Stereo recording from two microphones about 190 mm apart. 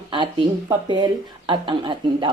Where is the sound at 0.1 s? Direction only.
25° right (ahead or behind).